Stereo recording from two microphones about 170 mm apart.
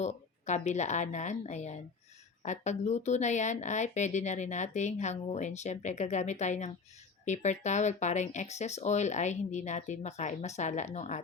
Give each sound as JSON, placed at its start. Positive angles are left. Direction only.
{"t": 0.0, "sound": "speech", "side_deg": 40}